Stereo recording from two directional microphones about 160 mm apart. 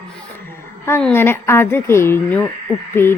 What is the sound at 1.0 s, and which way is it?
A woman's voice, 10° left (ahead or behind).